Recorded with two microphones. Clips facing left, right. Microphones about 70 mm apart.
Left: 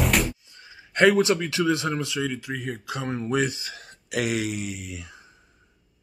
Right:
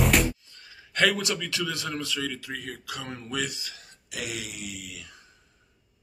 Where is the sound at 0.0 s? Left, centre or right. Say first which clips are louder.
Even; centre.